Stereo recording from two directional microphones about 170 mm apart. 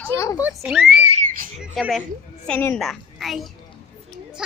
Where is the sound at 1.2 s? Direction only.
55° right (ahead or behind).